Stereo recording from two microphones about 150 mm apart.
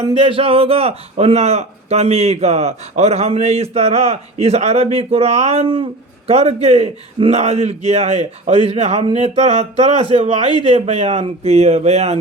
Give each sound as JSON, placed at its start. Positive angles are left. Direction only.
{"t": 0.2, "sound": "a man's voice", "side_deg": -40}